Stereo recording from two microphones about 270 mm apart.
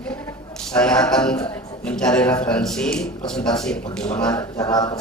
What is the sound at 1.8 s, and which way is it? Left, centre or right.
Speech, centre.